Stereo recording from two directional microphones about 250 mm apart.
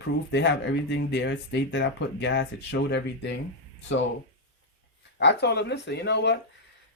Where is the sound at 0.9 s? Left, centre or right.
Left.